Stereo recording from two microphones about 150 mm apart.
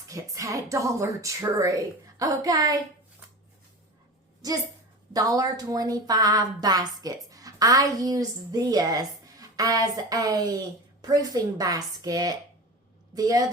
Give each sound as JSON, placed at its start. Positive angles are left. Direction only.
{"t": 0.1, "sound": "speech", "side_deg": -20}
{"t": 5.1, "sound": "a woman's voice", "side_deg": -25}